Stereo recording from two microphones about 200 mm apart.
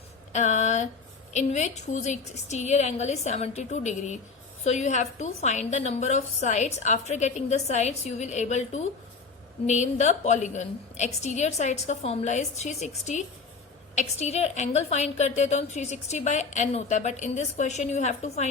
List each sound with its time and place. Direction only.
0.3 s a woman's voice: 35° left (ahead or behind)